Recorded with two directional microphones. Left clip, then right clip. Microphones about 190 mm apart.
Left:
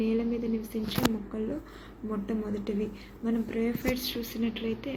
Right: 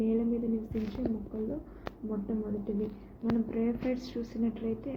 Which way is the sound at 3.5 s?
Centre (ahead or behind).